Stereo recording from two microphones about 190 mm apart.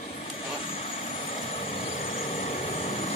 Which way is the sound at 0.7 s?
30° left (ahead or behind).